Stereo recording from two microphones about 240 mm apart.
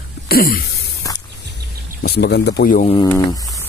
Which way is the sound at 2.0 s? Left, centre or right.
Left.